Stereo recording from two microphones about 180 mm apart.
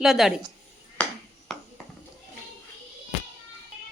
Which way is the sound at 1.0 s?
10° left (ahead or behind).